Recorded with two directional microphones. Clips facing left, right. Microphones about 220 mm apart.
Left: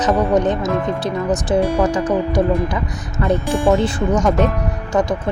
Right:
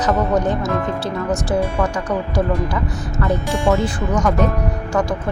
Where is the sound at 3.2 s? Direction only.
15° left (ahead or behind).